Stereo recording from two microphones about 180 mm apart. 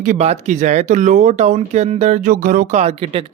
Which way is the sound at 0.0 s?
40° right (ahead or behind).